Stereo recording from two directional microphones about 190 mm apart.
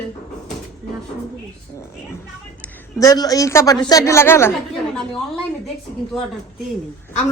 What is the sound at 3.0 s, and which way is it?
A woman's voice, 20° left (ahead or behind).